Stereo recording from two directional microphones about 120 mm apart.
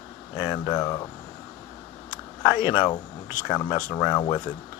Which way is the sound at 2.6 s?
40° left (ahead or behind).